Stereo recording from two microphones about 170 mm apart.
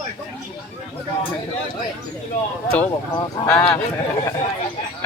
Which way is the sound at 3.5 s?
10° left (ahead or behind).